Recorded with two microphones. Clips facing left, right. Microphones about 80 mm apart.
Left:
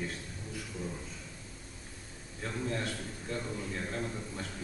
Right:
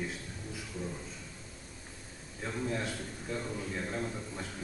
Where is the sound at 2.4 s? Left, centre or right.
Centre.